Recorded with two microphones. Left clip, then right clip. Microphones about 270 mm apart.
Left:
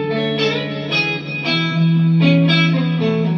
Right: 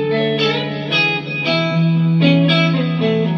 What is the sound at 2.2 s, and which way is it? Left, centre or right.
Music, left.